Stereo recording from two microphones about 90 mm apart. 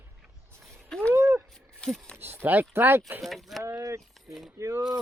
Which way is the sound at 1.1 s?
30° right (ahead or behind).